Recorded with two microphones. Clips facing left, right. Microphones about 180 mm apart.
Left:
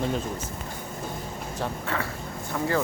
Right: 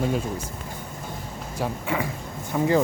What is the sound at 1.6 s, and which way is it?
Speech, 10° right (ahead or behind).